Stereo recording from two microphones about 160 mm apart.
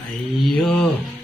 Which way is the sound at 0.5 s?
Centre (ahead or behind).